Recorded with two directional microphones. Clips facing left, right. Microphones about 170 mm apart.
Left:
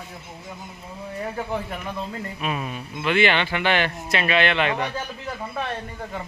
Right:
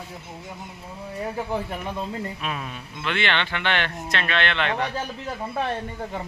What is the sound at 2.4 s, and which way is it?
Speech, 10° left (ahead or behind).